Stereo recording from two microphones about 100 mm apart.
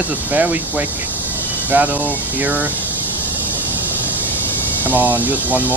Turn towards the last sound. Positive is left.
turn(degrees=-15)  # may be behind; listen again after turning